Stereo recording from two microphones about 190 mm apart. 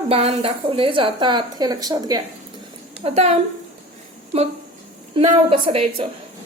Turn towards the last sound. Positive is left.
turn(degrees=-30)  # may be behind; listen again after turning